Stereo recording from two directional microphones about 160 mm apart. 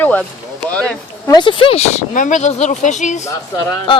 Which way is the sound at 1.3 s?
30° left (ahead or behind).